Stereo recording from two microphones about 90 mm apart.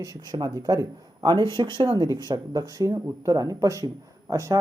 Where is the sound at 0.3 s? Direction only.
45° right (ahead or behind).